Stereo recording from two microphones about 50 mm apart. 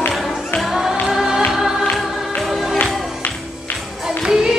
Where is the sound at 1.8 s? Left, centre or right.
Centre.